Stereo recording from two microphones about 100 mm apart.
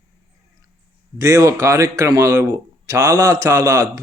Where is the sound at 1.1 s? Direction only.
35° right (ahead or behind).